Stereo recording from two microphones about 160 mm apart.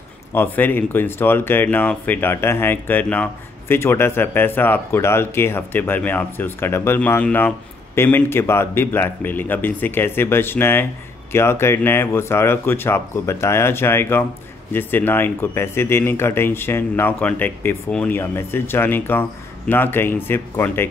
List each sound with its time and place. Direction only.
0.3 s speech: 15° left (ahead or behind)